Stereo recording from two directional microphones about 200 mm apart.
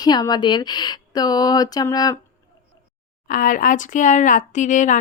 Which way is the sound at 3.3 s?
40° left (ahead or behind).